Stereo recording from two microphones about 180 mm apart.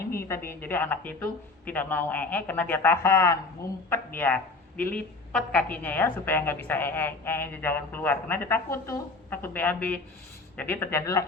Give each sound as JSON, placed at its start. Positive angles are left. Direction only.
{"t": 0.3, "sound": "a woman's voice", "side_deg": 10}